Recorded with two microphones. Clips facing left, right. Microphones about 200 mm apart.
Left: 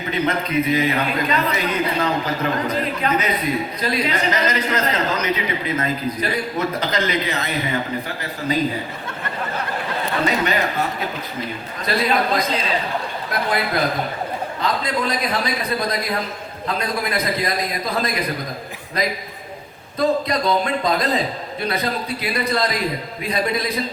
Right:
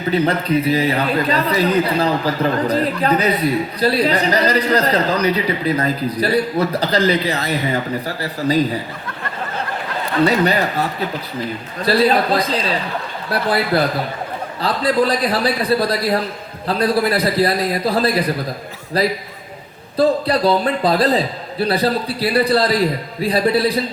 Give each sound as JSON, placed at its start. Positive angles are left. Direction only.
{"t": 0.1, "sound": "a man's voice", "side_deg": -35}
{"t": 10.2, "sound": "a man's voice", "side_deg": -35}
{"t": 11.9, "sound": "a man's voice", "side_deg": -35}
{"t": 14.6, "sound": "a man's voice", "side_deg": -35}